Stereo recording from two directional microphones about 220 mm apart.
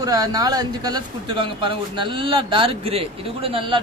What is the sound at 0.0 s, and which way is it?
Speech, 15° right (ahead or behind).